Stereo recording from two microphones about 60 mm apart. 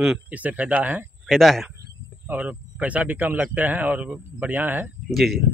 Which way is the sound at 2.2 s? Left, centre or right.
Right.